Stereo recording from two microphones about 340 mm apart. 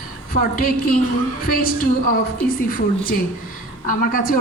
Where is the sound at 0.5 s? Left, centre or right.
Left.